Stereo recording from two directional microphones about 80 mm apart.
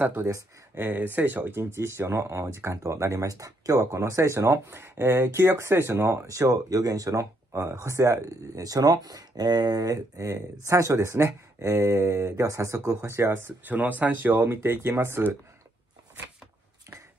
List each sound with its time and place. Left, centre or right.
0.0 s speech: right
13.7 s speech: right